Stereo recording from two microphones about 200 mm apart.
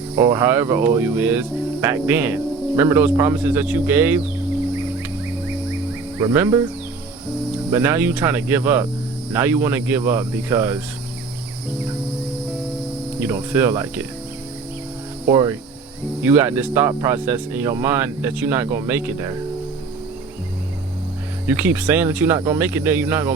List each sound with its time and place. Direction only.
0.2 s speech: 15° right (ahead or behind)
6.1 s speech: 15° right (ahead or behind)
7.7 s speech: 10° right (ahead or behind)
13.1 s speech: 10° right (ahead or behind)
15.3 s speech: 15° right (ahead or behind)
21.4 s speech: 10° right (ahead or behind)